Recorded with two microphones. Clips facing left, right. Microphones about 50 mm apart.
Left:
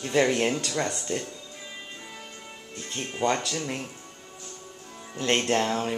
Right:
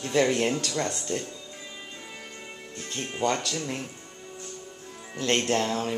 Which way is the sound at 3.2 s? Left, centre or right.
Centre.